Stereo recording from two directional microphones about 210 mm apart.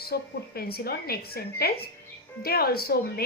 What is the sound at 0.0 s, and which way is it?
A woman's voice, 45° left (ahead or behind).